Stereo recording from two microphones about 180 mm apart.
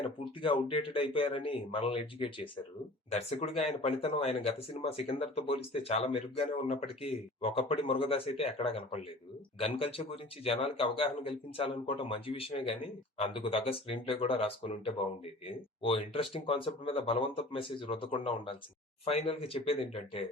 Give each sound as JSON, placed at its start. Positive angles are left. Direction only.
{"t": 0.0, "sound": "speech", "side_deg": 30}